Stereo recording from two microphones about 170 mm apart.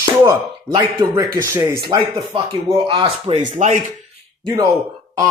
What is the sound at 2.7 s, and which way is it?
Speech, 35° right (ahead or behind).